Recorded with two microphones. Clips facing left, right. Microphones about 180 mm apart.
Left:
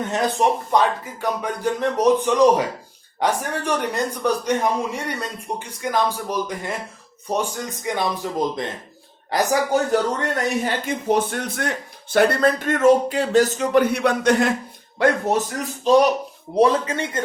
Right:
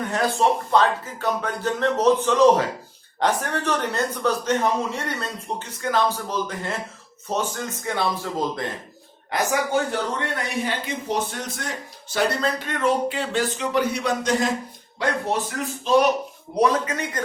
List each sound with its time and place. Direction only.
0.0 s a man's voice: 20° left (ahead or behind)
10.2 s speech: 45° left (ahead or behind); by 14.5 s 60° left (ahead or behind)
14.9 s speech: 45° left (ahead or behind)
16.6 s speech: 30° left (ahead or behind)